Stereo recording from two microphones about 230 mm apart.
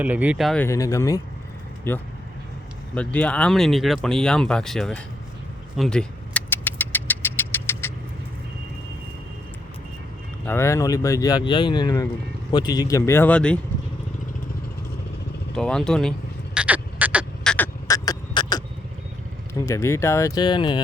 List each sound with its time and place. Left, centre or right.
0.0 s speech: centre
5.7 s vehicle: centre
10.4 s speech: centre
15.5 s speech: centre
16.6 s a sound: centre
19.6 s speech: centre